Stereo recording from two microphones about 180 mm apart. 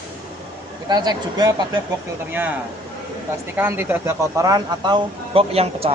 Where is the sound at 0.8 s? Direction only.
20° right (ahead or behind).